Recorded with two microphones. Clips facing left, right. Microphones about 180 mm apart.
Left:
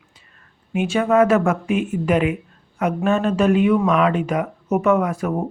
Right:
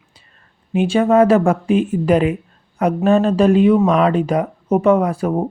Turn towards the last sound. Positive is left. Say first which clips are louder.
# right 3 dB
turn(degrees=-30)  # may be behind; listen again after turning